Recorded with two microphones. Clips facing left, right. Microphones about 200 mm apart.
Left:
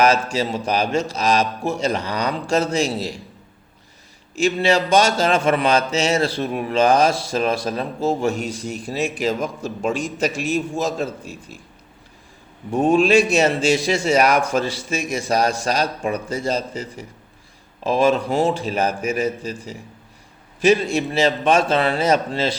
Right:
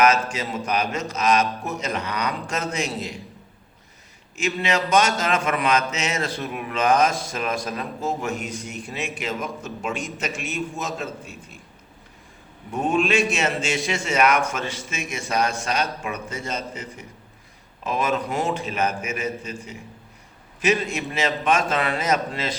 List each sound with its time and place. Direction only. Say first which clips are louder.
0.3 s speech: left 5 dB; 30° left (ahead or behind)
4.4 s speech: left 6 dB; 30° left (ahead or behind)
12.7 s speech: left 6 dB; 30° left (ahead or behind)
20.6 s speech: left 6 dB; 30° left (ahead or behind)